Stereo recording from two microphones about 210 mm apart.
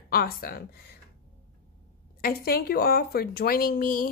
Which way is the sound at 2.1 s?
45° left (ahead or behind).